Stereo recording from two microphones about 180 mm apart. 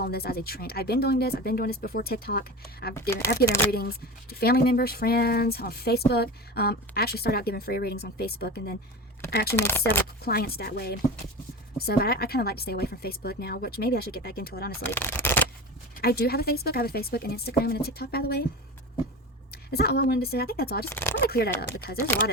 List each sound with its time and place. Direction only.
0.0 s speech: 60° left (ahead or behind)
3.1 s speech: 15° left (ahead or behind)
3.7 s speech: 60° left (ahead or behind)
9.6 s speech: 10° left (ahead or behind)
10.2 s speech: 60° left (ahead or behind)
14.8 s speech: 10° left (ahead or behind)
16.0 s speech: 60° left (ahead or behind)
19.7 s speech: 60° left (ahead or behind)
20.8 s speech: 10° left (ahead or behind)
21.2 s speech: 60° left (ahead or behind)